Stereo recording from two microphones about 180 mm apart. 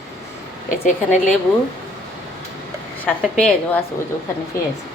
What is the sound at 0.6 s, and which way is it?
Speech, 40° left (ahead or behind).